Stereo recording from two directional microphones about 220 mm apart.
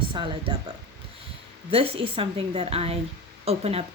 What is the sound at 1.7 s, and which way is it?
Speech, 25° right (ahead or behind).